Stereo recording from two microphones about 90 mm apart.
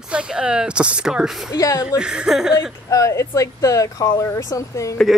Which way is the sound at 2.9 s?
35° left (ahead or behind).